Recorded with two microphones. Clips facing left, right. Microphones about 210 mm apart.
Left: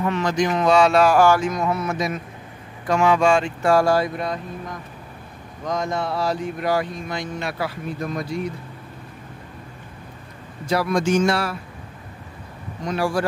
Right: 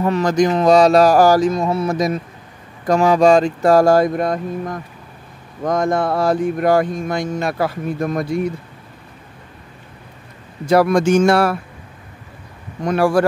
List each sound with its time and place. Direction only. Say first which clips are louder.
0.0 s speech: right 6 dB; 40° right (ahead or behind)
10.7 s speech: right 7 dB; 55° right (ahead or behind)
12.8 s speech: right 7 dB; 60° right (ahead or behind)